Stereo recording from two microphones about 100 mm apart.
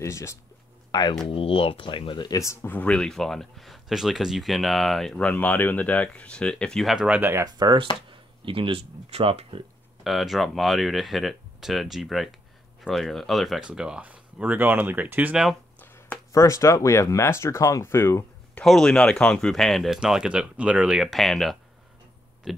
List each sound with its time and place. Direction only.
0.0 s speech: 30° left (ahead or behind)
1.2 s speech: 65° left (ahead or behind); by 2.4 s 45° left (ahead or behind)
2.4 s speech: 25° left (ahead or behind); by 7.1 s centre (ahead or behind)
7.1 s speech: 20° right (ahead or behind)
7.4 s speech: 40° right (ahead or behind)
8.1 s speech: 60° right (ahead or behind)
10.0 s speech: centre (ahead or behind); by 15.3 s 15° right (ahead or behind)
16.3 s speech: 30° left (ahead or behind)
18.6 s speech: 5° left (ahead or behind)
22.5 s a sound: centre (ahead or behind)